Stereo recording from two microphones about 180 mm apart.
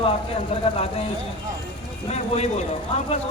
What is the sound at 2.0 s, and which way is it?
Speech, 35° left (ahead or behind).